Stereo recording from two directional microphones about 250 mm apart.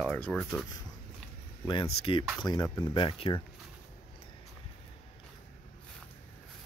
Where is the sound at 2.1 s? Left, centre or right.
Left.